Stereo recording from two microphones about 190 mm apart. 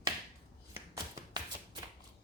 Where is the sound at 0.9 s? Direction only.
15° right (ahead or behind).